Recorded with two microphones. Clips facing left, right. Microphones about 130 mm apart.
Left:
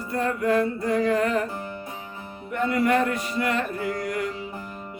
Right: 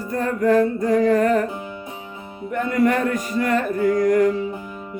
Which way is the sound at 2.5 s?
45° right (ahead or behind).